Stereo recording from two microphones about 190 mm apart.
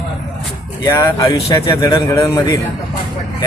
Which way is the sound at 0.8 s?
15° left (ahead or behind).